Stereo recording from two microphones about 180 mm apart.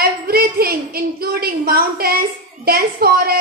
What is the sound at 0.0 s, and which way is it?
A woman's voice, 60° right (ahead or behind).